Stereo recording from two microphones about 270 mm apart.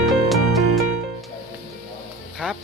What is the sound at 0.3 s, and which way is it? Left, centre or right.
Music, centre.